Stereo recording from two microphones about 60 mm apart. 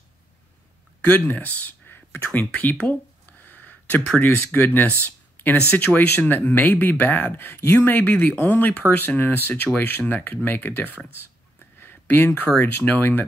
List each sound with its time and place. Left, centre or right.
1.0 s speech: left
2.7 s a sound: left
4.2 s speech: left
7.8 s speech: left
11.8 s a sound: left
12.8 s speech: left